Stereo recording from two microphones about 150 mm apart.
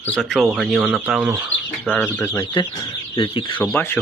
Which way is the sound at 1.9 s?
10° left (ahead or behind).